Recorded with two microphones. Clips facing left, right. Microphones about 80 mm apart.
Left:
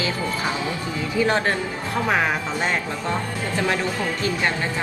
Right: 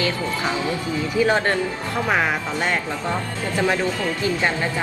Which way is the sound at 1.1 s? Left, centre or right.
Centre.